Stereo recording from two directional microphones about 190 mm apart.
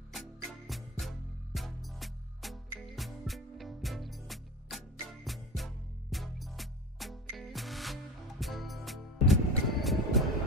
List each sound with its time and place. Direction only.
0.1 s music: centre (ahead or behind)